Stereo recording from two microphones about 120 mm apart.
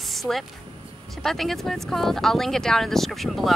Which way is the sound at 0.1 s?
Centre (ahead or behind).